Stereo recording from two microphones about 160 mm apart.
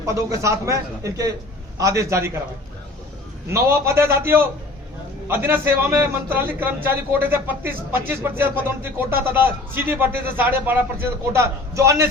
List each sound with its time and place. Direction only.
0.0 s a man's voice: 20° right (ahead or behind)
3.5 s a man's voice: 15° right (ahead or behind)